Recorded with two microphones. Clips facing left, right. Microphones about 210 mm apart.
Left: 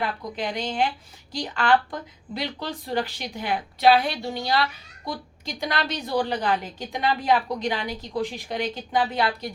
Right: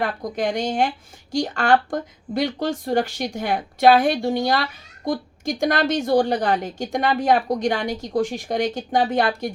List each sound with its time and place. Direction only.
0.0 s speech: 45° right (ahead or behind)